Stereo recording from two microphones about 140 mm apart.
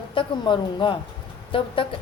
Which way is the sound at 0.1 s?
35° left (ahead or behind).